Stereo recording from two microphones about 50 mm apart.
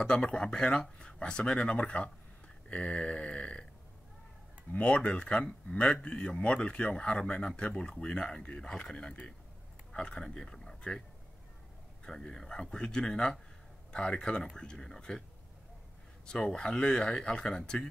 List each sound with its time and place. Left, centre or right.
0.0 s speech: centre
4.7 s speech: left
12.0 s speech: centre
16.3 s speech: centre